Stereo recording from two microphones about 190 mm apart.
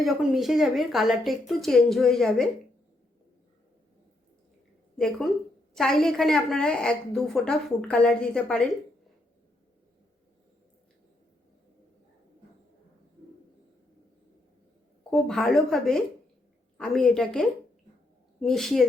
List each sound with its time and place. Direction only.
0.0 s a woman's voice: centre (ahead or behind)
4.9 s a woman's voice: 5° left (ahead or behind)
15.1 s a woman's voice: centre (ahead or behind)